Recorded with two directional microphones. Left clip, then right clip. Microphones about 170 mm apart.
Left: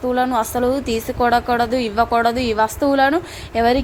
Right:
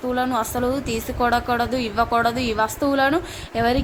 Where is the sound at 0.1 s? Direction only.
25° left (ahead or behind).